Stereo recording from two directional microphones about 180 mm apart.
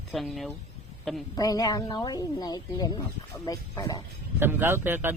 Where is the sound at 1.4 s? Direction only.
20° left (ahead or behind).